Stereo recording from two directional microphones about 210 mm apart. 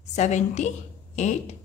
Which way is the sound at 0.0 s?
35° left (ahead or behind).